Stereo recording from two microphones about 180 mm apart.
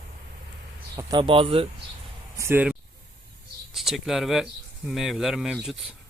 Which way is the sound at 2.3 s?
15° right (ahead or behind).